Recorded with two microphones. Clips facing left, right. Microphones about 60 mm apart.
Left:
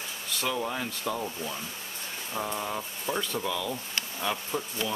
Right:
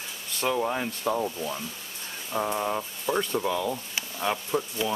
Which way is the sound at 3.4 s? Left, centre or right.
Right.